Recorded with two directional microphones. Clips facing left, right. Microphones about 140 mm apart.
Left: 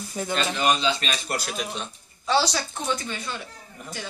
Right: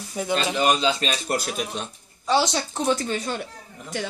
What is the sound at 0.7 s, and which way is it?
Speech, 40° right (ahead or behind).